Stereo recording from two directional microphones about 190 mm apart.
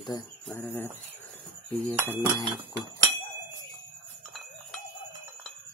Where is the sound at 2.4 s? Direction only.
20° right (ahead or behind).